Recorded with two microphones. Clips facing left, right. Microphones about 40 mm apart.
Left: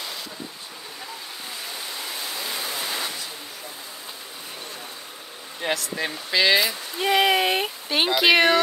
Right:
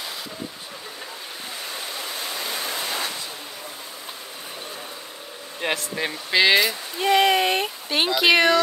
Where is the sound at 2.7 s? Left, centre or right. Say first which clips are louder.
Right 1 dB; right.